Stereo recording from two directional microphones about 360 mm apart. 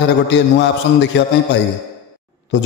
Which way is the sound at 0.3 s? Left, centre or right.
Left.